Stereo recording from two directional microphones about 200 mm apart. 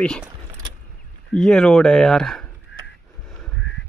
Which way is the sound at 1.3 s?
5° left (ahead or behind).